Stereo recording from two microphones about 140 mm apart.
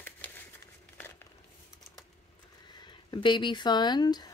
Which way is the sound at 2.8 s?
30° left (ahead or behind).